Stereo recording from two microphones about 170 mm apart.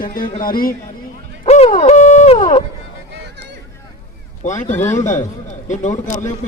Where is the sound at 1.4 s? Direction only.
35° left (ahead or behind).